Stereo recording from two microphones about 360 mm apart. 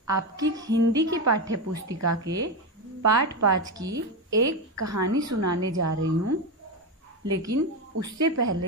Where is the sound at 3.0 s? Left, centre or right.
Right.